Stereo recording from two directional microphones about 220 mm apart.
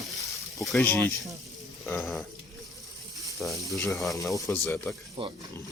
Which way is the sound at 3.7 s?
15° left (ahead or behind).